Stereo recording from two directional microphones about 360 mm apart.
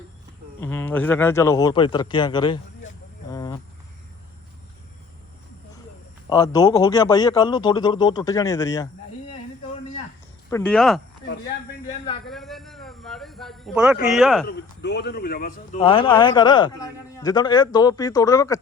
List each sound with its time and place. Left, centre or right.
0.6 s a man's voice: centre
6.2 s a man's voice: centre
10.5 s speech: centre
12.2 s a sound: centre
14.4 s a man's voice: left; by 18.6 s centre